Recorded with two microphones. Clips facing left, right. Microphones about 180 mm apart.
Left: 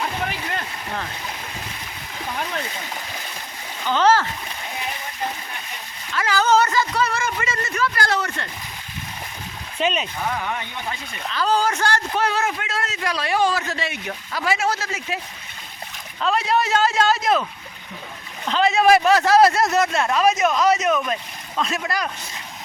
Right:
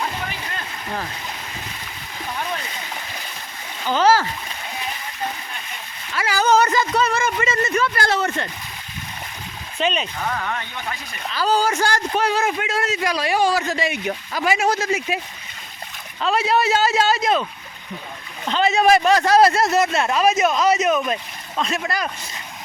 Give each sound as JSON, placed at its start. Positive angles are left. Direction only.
{"t": 3.9, "sound": "a man's voice", "side_deg": -10}
{"t": 6.1, "sound": "speech", "side_deg": -10}
{"t": 9.7, "sound": "speech", "side_deg": 5}
{"t": 11.3, "sound": "a man's voice", "side_deg": -10}
{"t": 16.2, "sound": "speech", "side_deg": 0}
{"t": 18.4, "sound": "speech", "side_deg": 0}